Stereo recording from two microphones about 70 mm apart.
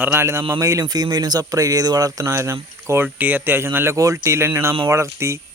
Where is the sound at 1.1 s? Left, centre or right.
Right.